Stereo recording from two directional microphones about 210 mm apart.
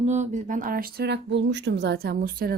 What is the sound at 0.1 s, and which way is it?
Speech, 35° right (ahead or behind).